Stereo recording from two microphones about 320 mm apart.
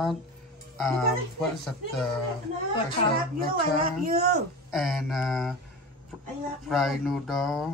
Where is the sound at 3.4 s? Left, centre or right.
Right.